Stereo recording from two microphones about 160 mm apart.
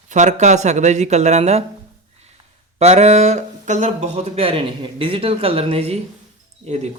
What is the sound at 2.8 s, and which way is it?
Speech, 40° right (ahead or behind).